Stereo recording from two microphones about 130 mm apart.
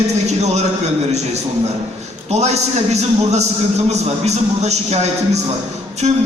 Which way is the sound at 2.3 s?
55° right (ahead or behind).